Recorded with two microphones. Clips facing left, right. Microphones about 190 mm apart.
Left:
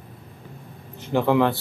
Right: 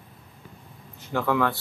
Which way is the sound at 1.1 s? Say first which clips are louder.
Left 5 dB; 25° left (ahead or behind).